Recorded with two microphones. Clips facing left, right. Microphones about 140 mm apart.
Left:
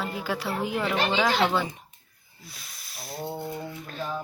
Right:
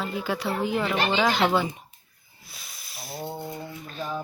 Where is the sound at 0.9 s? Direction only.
5° right (ahead or behind).